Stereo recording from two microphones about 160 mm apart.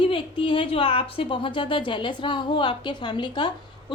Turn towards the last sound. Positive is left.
turn(degrees=30)  # may be behind; listen again after turning